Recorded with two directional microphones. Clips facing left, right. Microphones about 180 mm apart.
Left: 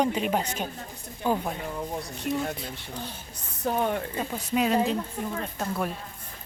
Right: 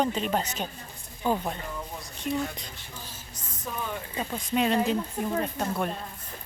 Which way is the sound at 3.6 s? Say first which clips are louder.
Left 8 dB; 65° left (ahead or behind).